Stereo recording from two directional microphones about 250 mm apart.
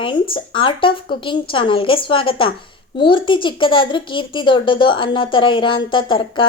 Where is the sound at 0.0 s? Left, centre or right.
Centre.